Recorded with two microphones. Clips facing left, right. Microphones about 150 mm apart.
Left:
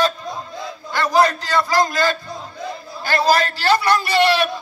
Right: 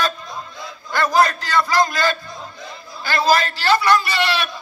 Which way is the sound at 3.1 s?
40° left (ahead or behind).